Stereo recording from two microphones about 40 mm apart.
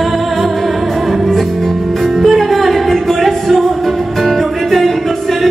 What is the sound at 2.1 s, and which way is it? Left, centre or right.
Music, centre.